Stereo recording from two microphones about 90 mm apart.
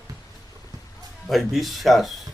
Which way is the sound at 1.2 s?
Centre (ahead or behind).